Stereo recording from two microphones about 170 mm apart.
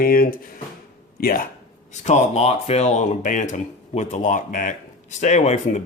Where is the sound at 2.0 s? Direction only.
40° left (ahead or behind).